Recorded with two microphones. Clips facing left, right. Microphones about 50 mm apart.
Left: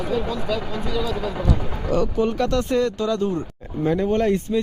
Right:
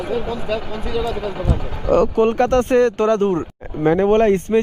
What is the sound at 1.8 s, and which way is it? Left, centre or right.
Speech, right.